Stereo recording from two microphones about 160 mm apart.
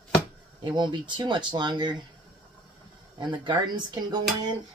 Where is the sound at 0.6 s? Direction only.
30° right (ahead or behind).